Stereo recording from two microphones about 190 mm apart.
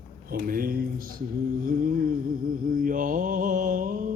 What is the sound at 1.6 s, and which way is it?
Mantra, 50° right (ahead or behind).